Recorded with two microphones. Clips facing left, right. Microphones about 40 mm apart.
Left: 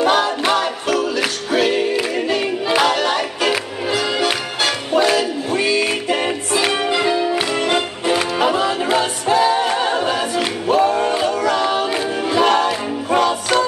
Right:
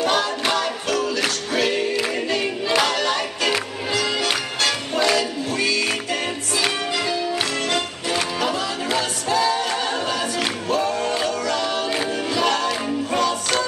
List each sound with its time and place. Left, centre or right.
0.0 s music: centre